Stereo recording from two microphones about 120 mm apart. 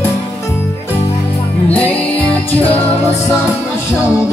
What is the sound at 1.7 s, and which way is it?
Music, 15° left (ahead or behind).